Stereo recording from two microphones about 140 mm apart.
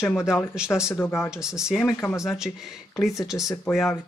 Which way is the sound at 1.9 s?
20° left (ahead or behind).